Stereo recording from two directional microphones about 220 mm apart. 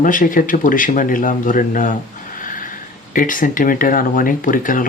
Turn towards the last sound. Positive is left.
turn(degrees=40)  # may be behind; listen again after turning